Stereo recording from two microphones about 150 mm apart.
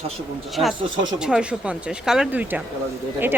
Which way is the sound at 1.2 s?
5° right (ahead or behind).